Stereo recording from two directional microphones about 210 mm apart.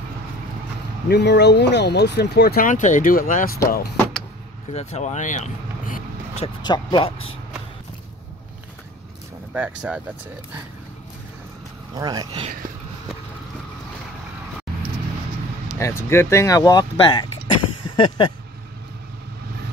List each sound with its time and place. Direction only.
1.0 s speech: 55° left (ahead or behind)
3.9 s vehicle: 5° left (ahead or behind)
4.7 s speech: 30° left (ahead or behind)
6.4 s speech: 20° left (ahead or behind)
9.5 s speech: 5° right (ahead or behind)
11.9 s speech: 20° right (ahead or behind)
15.8 s speech: 10° left (ahead or behind)